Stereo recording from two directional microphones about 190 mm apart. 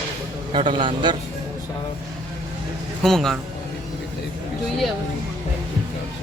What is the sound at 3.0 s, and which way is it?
Speech, centre (ahead or behind).